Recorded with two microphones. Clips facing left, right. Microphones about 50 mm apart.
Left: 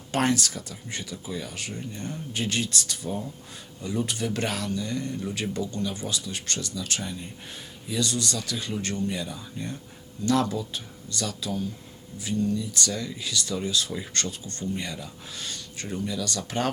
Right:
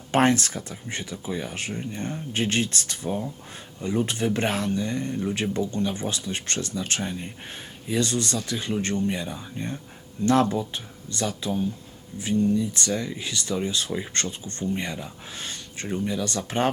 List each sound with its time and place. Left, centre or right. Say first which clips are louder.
0.1 s speech: right 4 dB; right